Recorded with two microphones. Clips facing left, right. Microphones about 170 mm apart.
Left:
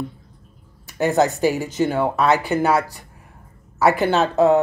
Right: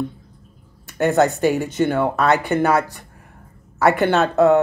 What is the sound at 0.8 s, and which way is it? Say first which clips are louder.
A woman's voice: right 1 dB; 60° right (ahead or behind).